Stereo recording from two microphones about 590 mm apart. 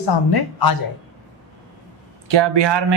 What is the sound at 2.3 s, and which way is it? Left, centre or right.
Speech, right.